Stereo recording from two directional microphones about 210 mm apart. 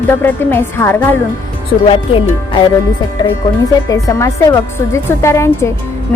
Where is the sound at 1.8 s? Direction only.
25° left (ahead or behind).